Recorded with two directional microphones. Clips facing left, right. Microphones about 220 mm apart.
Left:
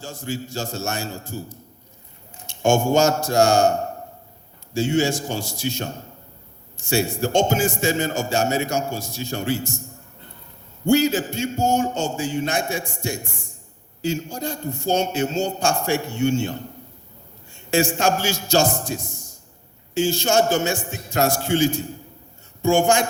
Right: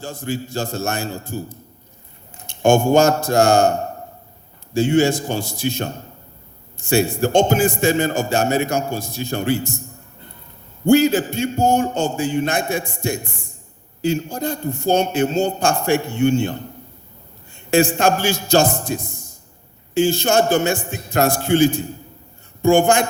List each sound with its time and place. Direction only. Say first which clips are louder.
0.0 s a man's voice: right 4 dB; 55° right (ahead or behind)
4.7 s a man's voice: right 4 dB; 55° right (ahead or behind)
10.8 s a man's voice: right 4 dB; 55° right (ahead or behind)